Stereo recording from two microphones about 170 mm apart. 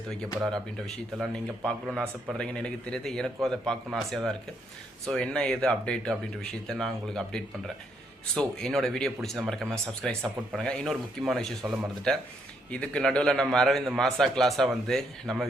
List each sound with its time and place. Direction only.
1.2 s a man's voice: 5° left (ahead or behind)
11.6 s speech: 10° right (ahead or behind)
12.1 s a man's voice: 5° left (ahead or behind)